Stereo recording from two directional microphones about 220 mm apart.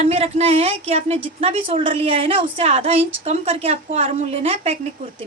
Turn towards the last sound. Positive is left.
turn(degrees=-30)  # may be behind; listen again after turning